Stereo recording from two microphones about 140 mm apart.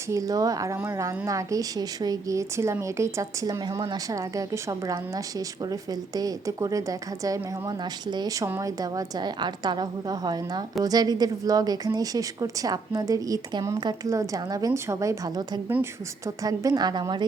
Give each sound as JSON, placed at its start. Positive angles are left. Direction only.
{"t": 0.1, "sound": "a woman's voice", "side_deg": -25}